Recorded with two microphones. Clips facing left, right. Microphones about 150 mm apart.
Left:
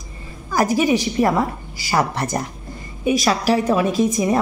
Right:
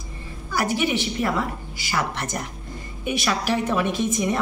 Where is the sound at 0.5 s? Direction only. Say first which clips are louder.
Left 6 dB; 40° left (ahead or behind).